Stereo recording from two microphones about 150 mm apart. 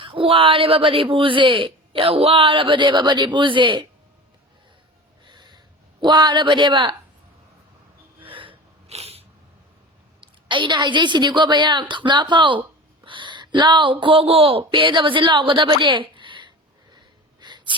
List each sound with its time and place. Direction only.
0.0 s speech: 35° right (ahead or behind)
5.2 s snort: 30° right (ahead or behind)
6.0 s speech: 30° right (ahead or behind)
8.2 s snort: 35° right (ahead or behind)
10.2 s speech: 35° right (ahead or behind)
13.1 s a sound: 30° right (ahead or behind)
14.0 s speech: 40° right (ahead or behind)
17.4 s a sound: 30° right (ahead or behind)